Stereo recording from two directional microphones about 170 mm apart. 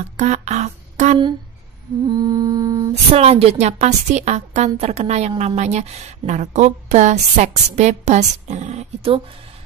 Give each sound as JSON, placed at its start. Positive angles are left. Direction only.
{"t": 0.2, "sound": "speech", "side_deg": -40}
{"t": 2.0, "sound": "music", "side_deg": -25}
{"t": 2.9, "sound": "a woman's voice", "side_deg": -40}
{"t": 5.3, "sound": "music", "side_deg": -30}
{"t": 5.6, "sound": "a woman's voice", "side_deg": -40}